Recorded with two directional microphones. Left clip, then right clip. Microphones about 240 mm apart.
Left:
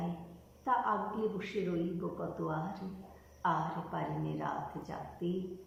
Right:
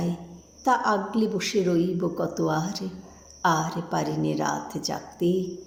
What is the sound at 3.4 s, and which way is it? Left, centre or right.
A woman's voice, right.